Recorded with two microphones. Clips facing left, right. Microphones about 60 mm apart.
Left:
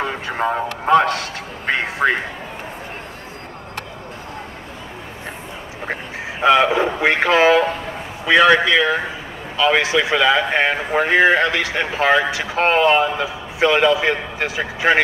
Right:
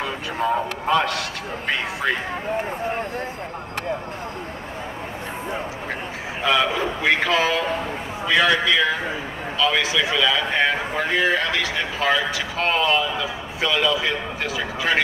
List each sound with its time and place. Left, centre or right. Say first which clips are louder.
0.0 s speech: left 3 dB; left
6.4 s speech: left 6 dB; left